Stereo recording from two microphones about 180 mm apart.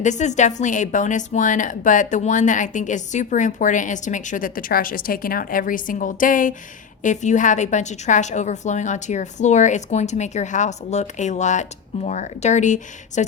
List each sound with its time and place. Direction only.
0.0 s a woman's voice: 40° left (ahead or behind)